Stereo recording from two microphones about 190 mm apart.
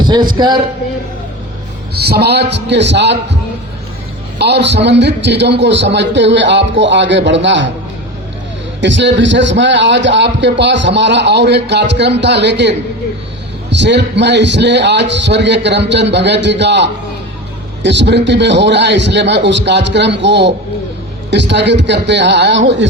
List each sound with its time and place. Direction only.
0.0 s a man's voice: 25° right (ahead or behind)
1.9 s a man's voice: 60° right (ahead or behind)
4.4 s a man's voice: 65° right (ahead or behind)
8.8 s a man's voice: 70° right (ahead or behind)